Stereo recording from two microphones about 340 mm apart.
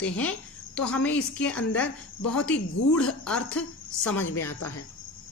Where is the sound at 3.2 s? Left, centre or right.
Centre.